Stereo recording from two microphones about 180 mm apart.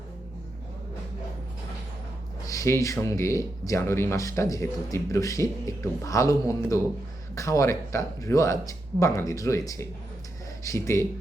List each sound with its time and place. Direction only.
2.5 s speech: 15° left (ahead or behind)